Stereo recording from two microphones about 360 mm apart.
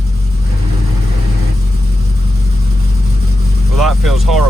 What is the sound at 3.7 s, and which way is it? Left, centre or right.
Speech, centre.